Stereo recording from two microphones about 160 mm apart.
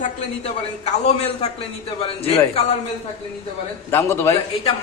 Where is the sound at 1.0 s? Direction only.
45° left (ahead or behind).